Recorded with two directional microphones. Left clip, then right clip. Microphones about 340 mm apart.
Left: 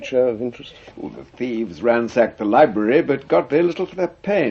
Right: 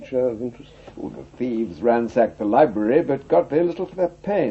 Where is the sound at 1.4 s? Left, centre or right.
Right.